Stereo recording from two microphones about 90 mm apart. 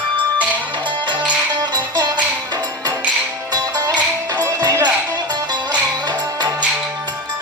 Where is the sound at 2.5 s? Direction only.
45° right (ahead or behind).